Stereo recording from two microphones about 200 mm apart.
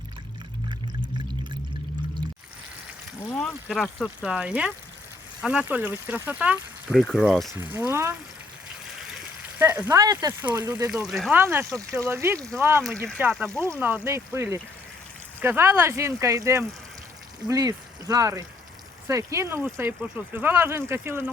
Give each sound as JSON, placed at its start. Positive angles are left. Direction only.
{"t": 3.2, "sound": "speech", "side_deg": 15}
{"t": 3.7, "sound": "speech", "side_deg": 0}
{"t": 7.5, "sound": "speech", "side_deg": -10}
{"t": 9.6, "sound": "speech", "side_deg": -10}
{"t": 11.0, "sound": "speech", "side_deg": 0}